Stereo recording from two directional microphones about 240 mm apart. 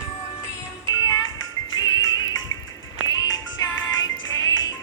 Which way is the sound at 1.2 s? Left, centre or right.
Left.